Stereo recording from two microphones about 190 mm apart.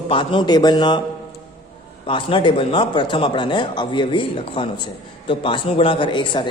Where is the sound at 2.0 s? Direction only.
25° left (ahead or behind).